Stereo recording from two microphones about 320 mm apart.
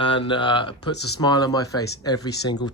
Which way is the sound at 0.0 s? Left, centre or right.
Centre.